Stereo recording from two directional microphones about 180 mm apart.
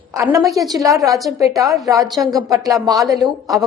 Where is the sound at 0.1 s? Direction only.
15° right (ahead or behind).